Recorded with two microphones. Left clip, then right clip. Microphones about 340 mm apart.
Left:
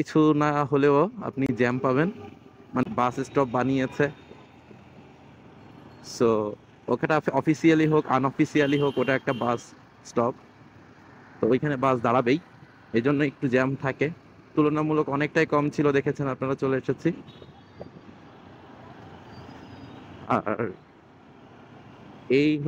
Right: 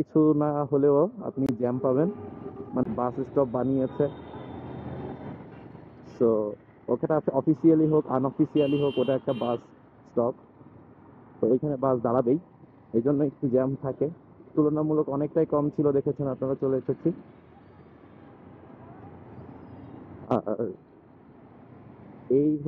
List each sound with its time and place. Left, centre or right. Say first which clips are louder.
0.1 s a man's voice: left 2 dB; left
3.3 s a man's voice: even; left
6.1 s a man's voice: left 1 dB; left
11.4 s a man's voice: left 1 dB; left
20.2 s a man's voice: left 2 dB; left